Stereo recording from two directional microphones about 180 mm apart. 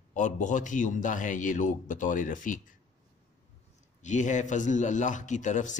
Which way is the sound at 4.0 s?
40° left (ahead or behind).